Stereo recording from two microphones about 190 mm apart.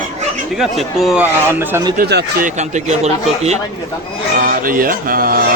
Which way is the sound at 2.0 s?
55° right (ahead or behind).